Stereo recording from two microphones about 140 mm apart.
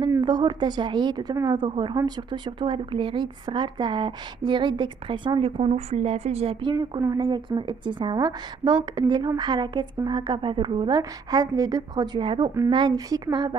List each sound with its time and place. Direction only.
0.2 s speech: 35° right (ahead or behind); by 6.5 s 50° right (ahead or behind)
6.6 s speech: 25° right (ahead or behind)